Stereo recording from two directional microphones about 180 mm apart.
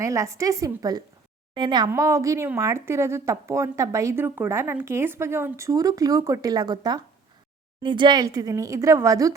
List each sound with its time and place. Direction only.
0.0 s speech: 15° right (ahead or behind)